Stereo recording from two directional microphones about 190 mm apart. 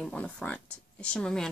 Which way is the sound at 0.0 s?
5° left (ahead or behind).